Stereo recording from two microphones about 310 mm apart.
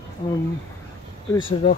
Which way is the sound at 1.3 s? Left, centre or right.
Centre.